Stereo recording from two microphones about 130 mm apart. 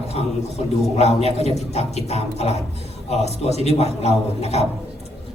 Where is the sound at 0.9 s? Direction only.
55° left (ahead or behind).